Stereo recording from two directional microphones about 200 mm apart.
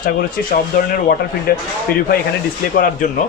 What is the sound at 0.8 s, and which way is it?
Speech, 45° left (ahead or behind).